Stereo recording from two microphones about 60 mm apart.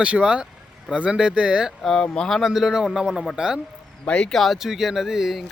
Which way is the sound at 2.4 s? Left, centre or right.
Centre.